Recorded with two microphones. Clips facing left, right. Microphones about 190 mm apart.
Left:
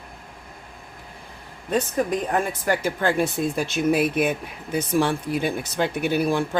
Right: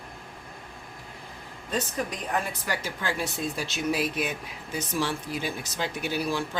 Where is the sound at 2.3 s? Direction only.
50° left (ahead or behind).